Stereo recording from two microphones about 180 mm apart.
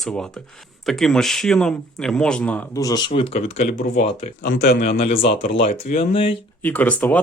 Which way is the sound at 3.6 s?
45° left (ahead or behind).